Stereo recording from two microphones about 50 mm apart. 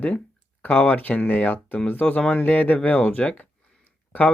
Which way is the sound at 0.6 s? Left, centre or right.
Left.